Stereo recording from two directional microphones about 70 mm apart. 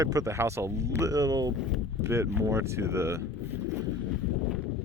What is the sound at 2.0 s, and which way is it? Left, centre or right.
Speech, right.